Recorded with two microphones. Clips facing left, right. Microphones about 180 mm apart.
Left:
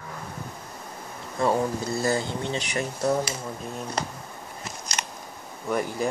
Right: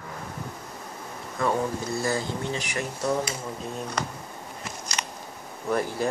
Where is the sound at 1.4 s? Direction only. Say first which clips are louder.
Left 2 dB; 30° left (ahead or behind).